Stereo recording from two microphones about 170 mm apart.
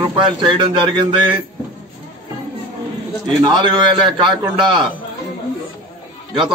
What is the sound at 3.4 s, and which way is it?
A man's voice, 25° right (ahead or behind).